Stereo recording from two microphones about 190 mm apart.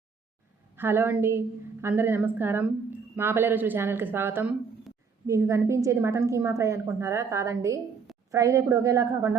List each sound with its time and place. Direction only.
0.8 s a woman's voice: 10° right (ahead or behind)